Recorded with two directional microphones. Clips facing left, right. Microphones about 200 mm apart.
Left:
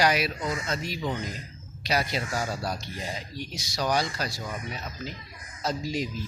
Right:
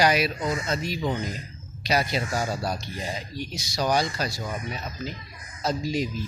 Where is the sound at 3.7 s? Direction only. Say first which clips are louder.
Right 3 dB; 25° right (ahead or behind).